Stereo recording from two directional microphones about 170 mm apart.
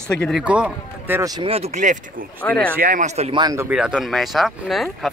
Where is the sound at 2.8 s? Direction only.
50° right (ahead or behind).